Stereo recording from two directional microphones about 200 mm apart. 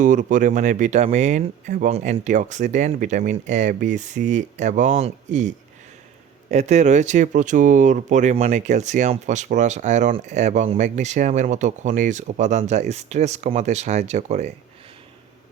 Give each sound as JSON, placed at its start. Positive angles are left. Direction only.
{"t": 0.0, "sound": "speech", "side_deg": -40}